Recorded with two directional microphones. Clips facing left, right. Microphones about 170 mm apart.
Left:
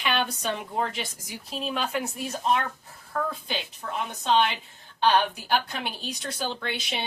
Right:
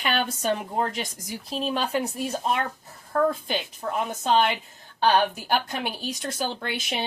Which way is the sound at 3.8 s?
35° right (ahead or behind).